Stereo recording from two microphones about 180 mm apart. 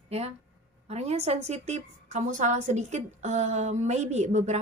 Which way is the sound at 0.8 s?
35° right (ahead or behind).